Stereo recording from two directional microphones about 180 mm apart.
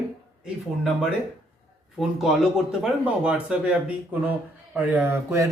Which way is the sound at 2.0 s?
Centre (ahead or behind).